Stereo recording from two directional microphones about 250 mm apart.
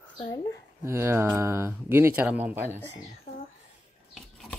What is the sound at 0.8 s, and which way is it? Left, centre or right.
Speech, centre.